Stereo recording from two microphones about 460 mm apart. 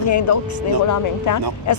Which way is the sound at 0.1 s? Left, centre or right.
Left.